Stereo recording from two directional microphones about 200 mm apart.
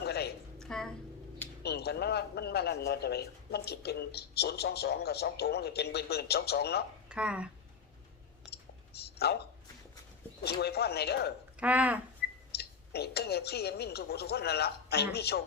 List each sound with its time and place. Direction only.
0.0 s music: 55° left (ahead or behind)
0.6 s a sound: 5° left (ahead or behind)
1.6 s a man's voice: 55° left (ahead or behind)
7.1 s speech: 5° right (ahead or behind)
8.9 s a sound: 55° left (ahead or behind)
10.4 s a man's voice: 55° left (ahead or behind)
11.6 s speech: 5° right (ahead or behind)
12.5 s speech: 55° left (ahead or behind)